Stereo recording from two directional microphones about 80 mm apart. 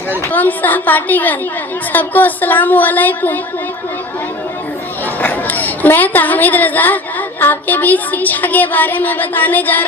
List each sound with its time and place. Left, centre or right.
0.3 s a woman's voice: left
5.2 s a woman's voice: left